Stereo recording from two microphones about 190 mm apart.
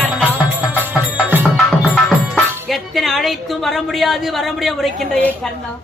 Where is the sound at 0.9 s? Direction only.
10° right (ahead or behind).